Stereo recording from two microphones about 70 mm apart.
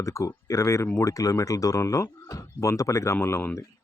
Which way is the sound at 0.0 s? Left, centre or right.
Left.